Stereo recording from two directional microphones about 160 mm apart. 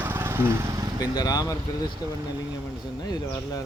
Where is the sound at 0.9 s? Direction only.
25° left (ahead or behind).